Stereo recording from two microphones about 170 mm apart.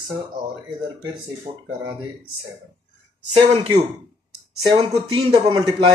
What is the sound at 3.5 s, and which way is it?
Speech, 35° right (ahead or behind).